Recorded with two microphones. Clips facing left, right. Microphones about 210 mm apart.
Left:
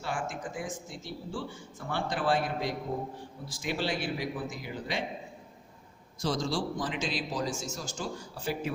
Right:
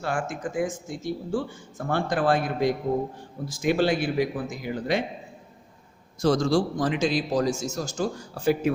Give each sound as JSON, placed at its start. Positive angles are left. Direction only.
{"t": 0.0, "sound": "speech", "side_deg": -65}
{"t": 0.6, "sound": "speech", "side_deg": -45}
{"t": 6.2, "sound": "speech", "side_deg": -50}